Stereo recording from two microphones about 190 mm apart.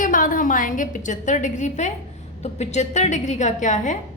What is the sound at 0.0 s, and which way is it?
A woman's voice, 45° left (ahead or behind).